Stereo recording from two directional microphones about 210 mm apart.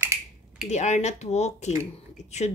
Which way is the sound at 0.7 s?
35° left (ahead or behind).